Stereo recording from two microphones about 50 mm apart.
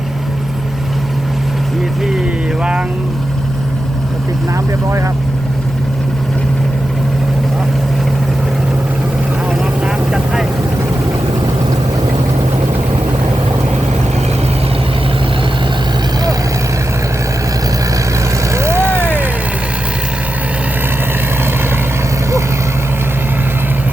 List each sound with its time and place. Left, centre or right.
9.6 s vehicle: centre
18.5 s vehicle: right